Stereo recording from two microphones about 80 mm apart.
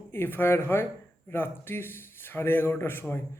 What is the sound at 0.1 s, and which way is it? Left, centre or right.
A man's voice, left.